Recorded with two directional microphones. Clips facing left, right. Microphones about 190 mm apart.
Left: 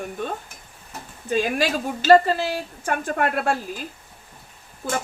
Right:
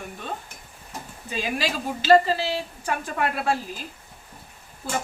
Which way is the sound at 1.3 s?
50° left (ahead or behind).